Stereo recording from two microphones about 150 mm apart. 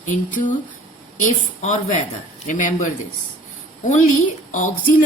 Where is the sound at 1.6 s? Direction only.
50° left (ahead or behind).